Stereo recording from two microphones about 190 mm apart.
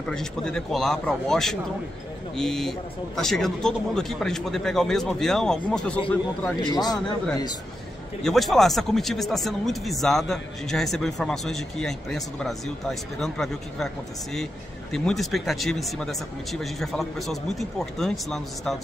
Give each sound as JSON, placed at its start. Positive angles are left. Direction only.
{"t": 0.1, "sound": "speech", "side_deg": 5}
{"t": 6.7, "sound": "a man's voice", "side_deg": 20}
{"t": 8.2, "sound": "speech", "side_deg": 0}